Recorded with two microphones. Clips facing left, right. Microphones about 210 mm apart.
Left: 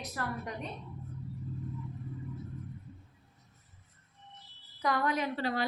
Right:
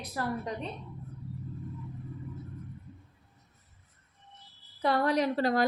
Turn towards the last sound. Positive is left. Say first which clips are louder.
# right 6 dB
turn(degrees=-40)  # may be behind; listen again after turning